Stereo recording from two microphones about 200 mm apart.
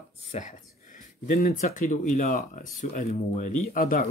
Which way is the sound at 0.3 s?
40° left (ahead or behind).